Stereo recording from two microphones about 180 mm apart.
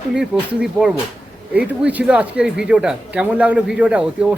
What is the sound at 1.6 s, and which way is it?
A man's voice, 5° right (ahead or behind).